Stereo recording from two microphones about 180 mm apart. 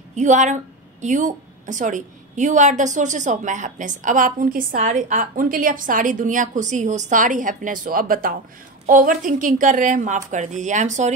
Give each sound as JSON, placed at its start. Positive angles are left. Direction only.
{"t": 0.1, "sound": "a woman's voice", "side_deg": -40}